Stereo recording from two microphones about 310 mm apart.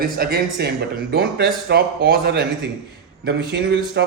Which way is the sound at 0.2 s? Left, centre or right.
Right.